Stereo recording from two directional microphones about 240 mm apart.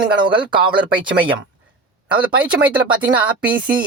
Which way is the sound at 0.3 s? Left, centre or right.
Centre.